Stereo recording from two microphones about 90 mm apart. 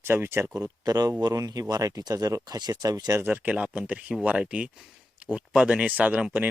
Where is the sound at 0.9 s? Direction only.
45° right (ahead or behind).